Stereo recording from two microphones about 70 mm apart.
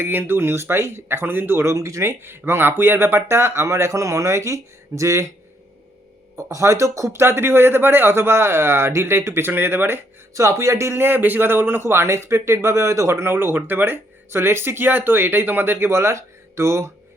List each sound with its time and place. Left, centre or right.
0.0 s speech: right
6.3 s speech: right
10.3 s speech: right
13.3 s speech: right